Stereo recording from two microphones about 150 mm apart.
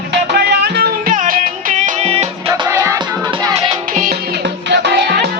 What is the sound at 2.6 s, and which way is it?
Music, 20° right (ahead or behind).